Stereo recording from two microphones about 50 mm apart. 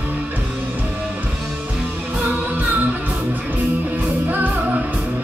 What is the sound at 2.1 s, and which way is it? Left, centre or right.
Music, right.